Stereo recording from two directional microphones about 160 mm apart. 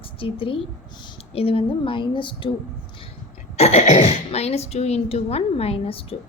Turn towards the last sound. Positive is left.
turn(degrees=35)  # may be behind; listen again after turning